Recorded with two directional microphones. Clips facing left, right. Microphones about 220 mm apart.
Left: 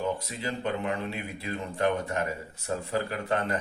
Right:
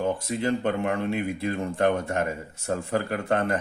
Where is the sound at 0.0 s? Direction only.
50° right (ahead or behind).